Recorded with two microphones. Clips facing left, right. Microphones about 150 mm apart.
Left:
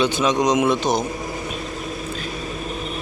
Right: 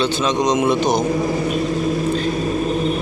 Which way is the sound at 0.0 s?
15° left (ahead or behind).